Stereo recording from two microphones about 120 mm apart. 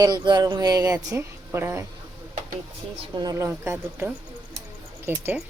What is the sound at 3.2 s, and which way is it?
Speech, 30° right (ahead or behind).